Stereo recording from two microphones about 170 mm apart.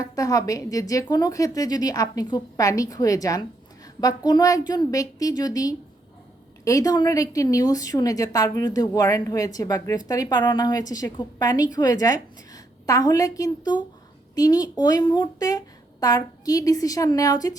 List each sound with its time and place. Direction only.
0.0 s a woman's voice: 20° left (ahead or behind)